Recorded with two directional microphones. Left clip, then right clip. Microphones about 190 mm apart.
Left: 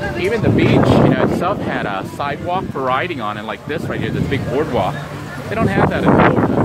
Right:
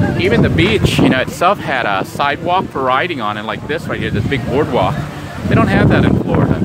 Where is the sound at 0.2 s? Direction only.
30° right (ahead or behind).